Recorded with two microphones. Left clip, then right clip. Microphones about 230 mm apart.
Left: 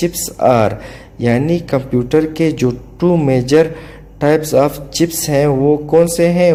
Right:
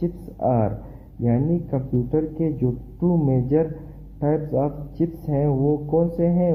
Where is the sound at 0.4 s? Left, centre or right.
Left.